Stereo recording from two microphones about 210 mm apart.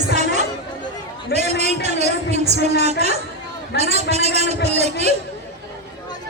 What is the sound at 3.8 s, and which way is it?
A man's voice, 30° right (ahead or behind).